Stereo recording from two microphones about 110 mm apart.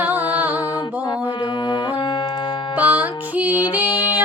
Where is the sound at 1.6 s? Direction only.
45° left (ahead or behind).